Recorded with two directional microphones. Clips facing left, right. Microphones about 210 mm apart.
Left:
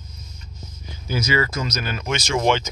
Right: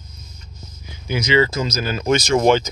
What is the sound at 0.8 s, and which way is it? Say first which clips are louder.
Speech: right 2 dB; 15° right (ahead or behind).